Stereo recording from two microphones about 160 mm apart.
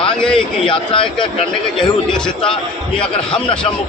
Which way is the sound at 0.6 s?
35° left (ahead or behind).